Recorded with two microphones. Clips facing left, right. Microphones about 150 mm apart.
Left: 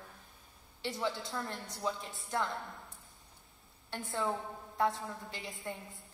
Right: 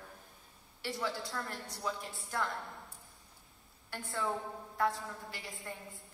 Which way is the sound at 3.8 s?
20° left (ahead or behind).